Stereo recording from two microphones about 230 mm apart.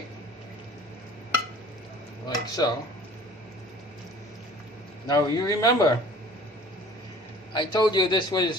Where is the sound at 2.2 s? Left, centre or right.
Centre.